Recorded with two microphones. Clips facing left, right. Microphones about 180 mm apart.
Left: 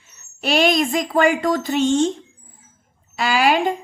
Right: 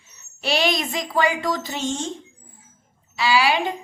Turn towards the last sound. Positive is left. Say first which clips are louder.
# left 2 dB
turn(degrees=45)  # may be behind; listen again after turning